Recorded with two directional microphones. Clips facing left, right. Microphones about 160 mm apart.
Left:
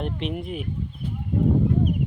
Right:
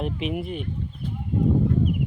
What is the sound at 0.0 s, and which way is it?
Speech, 5° right (ahead or behind).